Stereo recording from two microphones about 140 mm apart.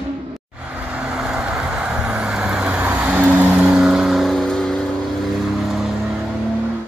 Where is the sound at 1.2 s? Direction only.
5° right (ahead or behind).